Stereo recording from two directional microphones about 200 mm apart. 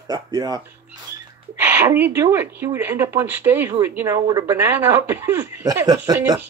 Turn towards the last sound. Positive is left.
turn(degrees=-15)  # may be behind; listen again after turning